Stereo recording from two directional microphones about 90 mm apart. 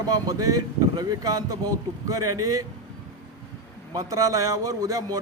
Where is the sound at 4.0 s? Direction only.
45° right (ahead or behind).